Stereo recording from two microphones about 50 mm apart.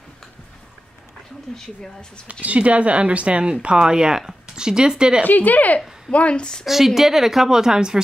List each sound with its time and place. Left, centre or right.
1.5 s speech: centre
2.4 s a woman's voice: right
5.2 s speech: left
6.1 s a woman's voice: left
6.6 s a woman's voice: centre